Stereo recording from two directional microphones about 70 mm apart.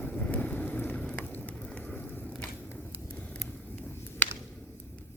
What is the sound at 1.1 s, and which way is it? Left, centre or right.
Rain on surface, left.